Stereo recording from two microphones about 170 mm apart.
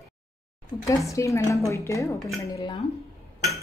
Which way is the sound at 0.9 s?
20° left (ahead or behind).